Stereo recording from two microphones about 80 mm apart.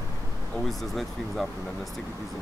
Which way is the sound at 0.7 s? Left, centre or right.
Centre.